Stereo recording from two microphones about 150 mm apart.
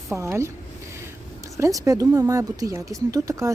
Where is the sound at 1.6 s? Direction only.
20° right (ahead or behind).